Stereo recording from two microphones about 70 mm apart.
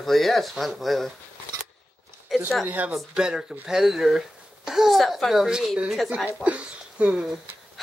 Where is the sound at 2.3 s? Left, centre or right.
Centre.